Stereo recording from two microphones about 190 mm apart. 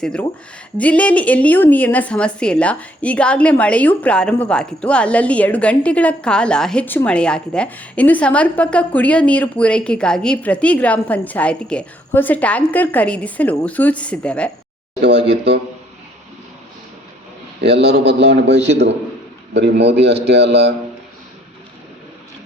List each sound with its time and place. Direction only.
0.0 s a woman's voice: 5° left (ahead or behind)
18.0 s a man's voice: 60° right (ahead or behind)
18.5 s a man's voice: 35° right (ahead or behind)
19.5 s a man's voice: 65° right (ahead or behind)